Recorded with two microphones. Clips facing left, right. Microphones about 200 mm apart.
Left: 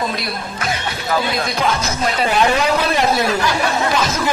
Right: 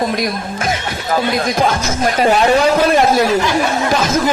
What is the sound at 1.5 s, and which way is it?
Speech, 50° right (ahead or behind).